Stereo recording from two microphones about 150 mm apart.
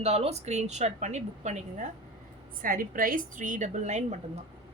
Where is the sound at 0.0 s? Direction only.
45° right (ahead or behind).